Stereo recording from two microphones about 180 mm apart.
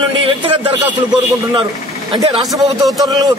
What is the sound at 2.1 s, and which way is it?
Speech, 25° right (ahead or behind).